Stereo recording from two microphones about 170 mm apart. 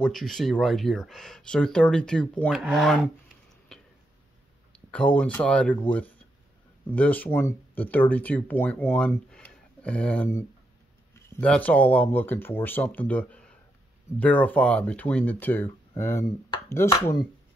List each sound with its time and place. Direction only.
0.0 s speech: centre (ahead or behind)
4.7 s speech: 5° left (ahead or behind)